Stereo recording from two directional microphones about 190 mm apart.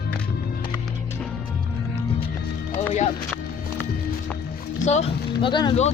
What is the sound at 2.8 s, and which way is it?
Music, 35° left (ahead or behind).